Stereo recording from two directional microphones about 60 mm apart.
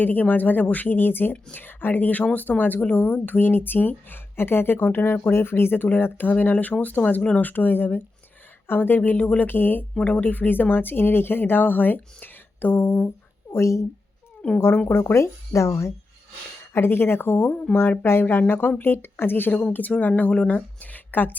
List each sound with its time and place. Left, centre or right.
0.0 s speech: left
13.5 s speech: left
14.6 s speech: left
15.0 s speech: left
16.7 s speech: left
17.5 s speech: left
18.0 s speech: left
19.6 s speech: left